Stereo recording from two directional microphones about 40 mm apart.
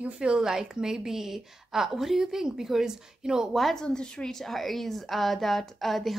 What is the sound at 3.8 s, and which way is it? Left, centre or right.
Speech, left.